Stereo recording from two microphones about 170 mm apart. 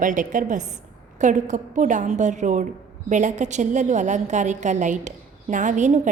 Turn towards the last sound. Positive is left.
turn(degrees=-45)  # may be behind; listen again after turning